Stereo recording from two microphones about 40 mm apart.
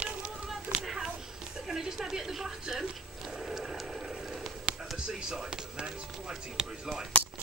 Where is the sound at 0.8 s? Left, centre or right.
Centre.